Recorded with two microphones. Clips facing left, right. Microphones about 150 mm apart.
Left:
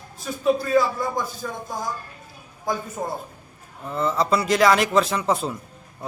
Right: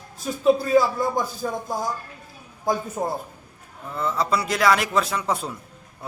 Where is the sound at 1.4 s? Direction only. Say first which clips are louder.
Right 4 dB; 25° right (ahead or behind).